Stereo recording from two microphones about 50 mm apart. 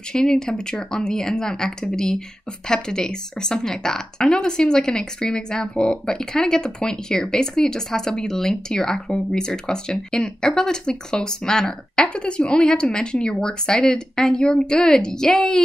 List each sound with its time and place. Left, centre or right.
0.1 s speech: centre
12.1 s speech: left